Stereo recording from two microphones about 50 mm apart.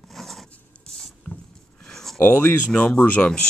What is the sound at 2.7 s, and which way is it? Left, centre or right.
Speech, left.